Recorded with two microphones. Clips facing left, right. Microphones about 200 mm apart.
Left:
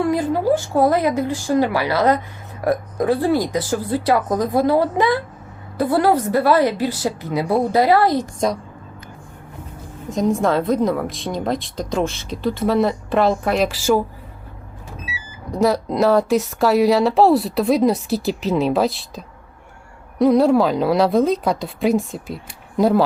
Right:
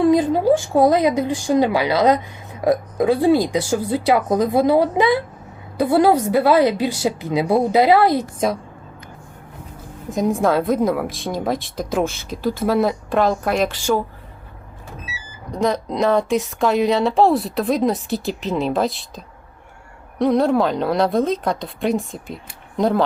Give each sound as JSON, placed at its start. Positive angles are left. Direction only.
{"t": 0.0, "sound": "a sound", "side_deg": -20}
{"t": 0.7, "sound": "speech", "side_deg": -15}
{"t": 10.1, "sound": "a woman's voice", "side_deg": -5}
{"t": 15.5, "sound": "a woman's voice", "side_deg": 5}